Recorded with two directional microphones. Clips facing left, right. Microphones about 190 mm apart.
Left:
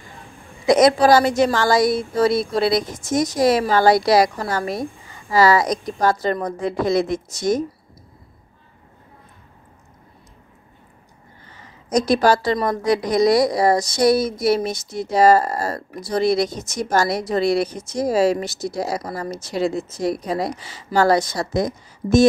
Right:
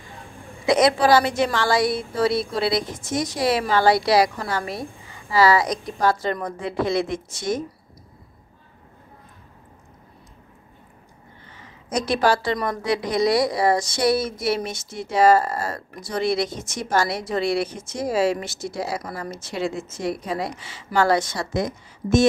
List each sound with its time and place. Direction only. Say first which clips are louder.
0.7 s a woman's voice: left 4 dB; 40° left (ahead or behind)
11.9 s a woman's voice: left 4 dB; 40° left (ahead or behind)